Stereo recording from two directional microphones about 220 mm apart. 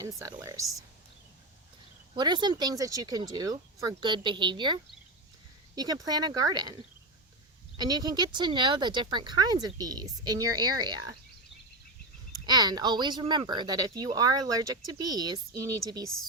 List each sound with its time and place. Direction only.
0.0 s speech: 15° right (ahead or behind)
2.1 s speech: 20° right (ahead or behind)
7.8 s speech: 20° right (ahead or behind)
12.5 s speech: 20° right (ahead or behind)